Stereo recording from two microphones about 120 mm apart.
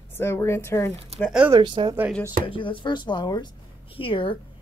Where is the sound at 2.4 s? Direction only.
45° left (ahead or behind).